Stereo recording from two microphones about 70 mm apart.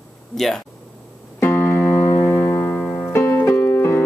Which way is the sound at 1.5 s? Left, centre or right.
Left.